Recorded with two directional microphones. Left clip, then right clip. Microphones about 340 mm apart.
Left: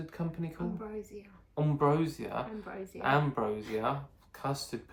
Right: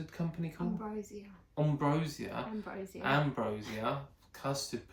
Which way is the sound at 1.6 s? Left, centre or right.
Centre.